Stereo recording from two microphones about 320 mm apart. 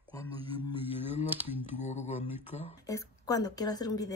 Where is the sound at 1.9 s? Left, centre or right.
Left.